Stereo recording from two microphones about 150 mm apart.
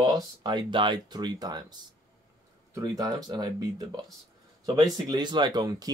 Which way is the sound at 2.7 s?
25° right (ahead or behind).